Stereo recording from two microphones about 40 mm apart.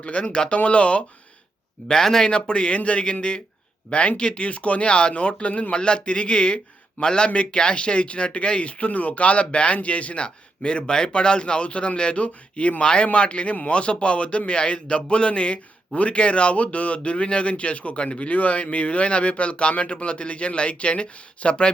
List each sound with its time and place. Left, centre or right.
0.0 s a man's voice: left
1.9 s speech: centre
2.3 s a man's voice: left
5.7 s a man's voice: left
12.8 s a man's voice: left
18.3 s a man's voice: left